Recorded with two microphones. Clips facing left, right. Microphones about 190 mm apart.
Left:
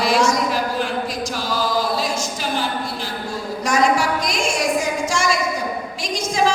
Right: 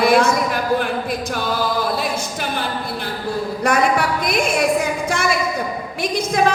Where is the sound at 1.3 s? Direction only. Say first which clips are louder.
Right 3 dB; 60° right (ahead or behind).